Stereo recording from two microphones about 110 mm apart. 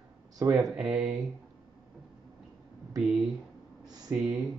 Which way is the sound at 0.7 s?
5° right (ahead or behind).